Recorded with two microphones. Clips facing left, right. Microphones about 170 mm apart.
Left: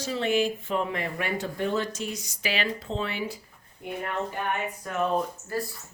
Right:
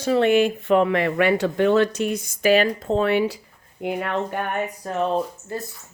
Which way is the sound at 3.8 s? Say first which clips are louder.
Right 7 dB; 85° right.